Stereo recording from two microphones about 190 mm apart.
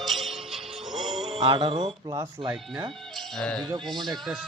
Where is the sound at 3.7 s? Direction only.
25° right (ahead or behind).